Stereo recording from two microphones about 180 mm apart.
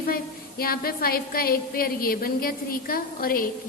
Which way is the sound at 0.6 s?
55° left (ahead or behind).